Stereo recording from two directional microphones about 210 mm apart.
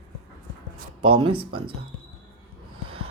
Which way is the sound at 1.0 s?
25° right (ahead or behind).